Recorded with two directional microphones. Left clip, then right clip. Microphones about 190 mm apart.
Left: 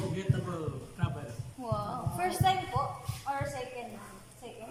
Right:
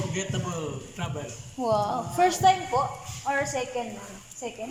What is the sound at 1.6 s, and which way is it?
A woman's voice, 30° right (ahead or behind).